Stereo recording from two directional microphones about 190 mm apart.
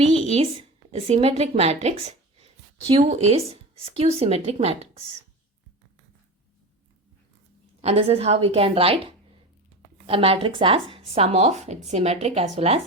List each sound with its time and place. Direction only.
0.3 s a woman's voice: 30° right (ahead or behind)
7.8 s speech: 35° right (ahead or behind)